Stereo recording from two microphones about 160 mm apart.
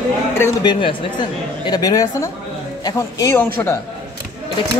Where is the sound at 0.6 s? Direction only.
30° left (ahead or behind).